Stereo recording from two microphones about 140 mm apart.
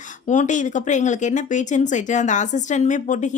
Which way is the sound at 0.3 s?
60° left (ahead or behind).